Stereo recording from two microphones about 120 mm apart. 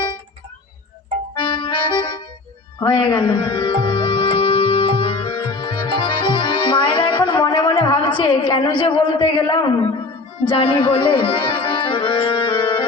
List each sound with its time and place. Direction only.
1.4 s accordion: 45° left (ahead or behind)
2.8 s music: 45° left (ahead or behind)
7.4 s a woman's voice: 40° left (ahead or behind)
10.4 s music: 45° left (ahead or behind)